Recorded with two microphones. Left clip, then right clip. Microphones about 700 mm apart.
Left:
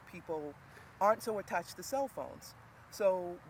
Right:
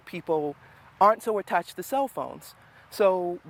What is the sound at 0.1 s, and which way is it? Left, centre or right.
Speech, right.